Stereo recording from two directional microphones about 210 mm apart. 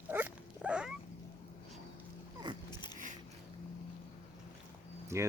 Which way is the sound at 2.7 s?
20° left (ahead or behind).